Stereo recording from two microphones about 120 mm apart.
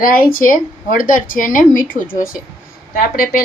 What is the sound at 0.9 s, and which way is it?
Speech, 90° left.